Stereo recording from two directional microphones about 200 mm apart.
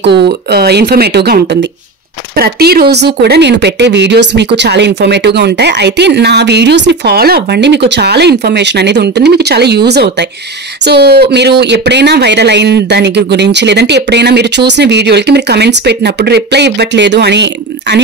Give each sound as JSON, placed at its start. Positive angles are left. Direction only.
{"t": 0.0, "sound": "speech", "side_deg": -55}